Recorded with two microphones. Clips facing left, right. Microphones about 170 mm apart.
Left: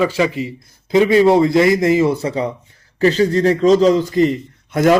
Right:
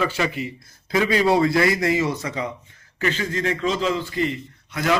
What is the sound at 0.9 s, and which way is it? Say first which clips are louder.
A man's voice: left 8 dB; 25° left (ahead or behind).